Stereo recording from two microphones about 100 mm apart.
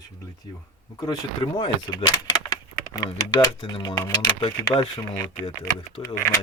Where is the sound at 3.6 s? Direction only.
50° left (ahead or behind).